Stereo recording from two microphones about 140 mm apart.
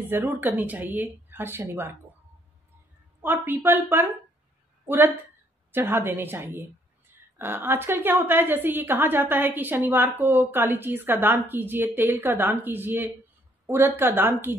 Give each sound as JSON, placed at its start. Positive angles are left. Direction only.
{"t": 0.0, "sound": "a woman's voice", "side_deg": -15}
{"t": 3.2, "sound": "a woman's voice", "side_deg": -15}